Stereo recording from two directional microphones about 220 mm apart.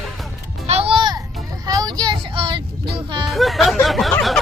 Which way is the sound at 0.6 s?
25° right (ahead or behind).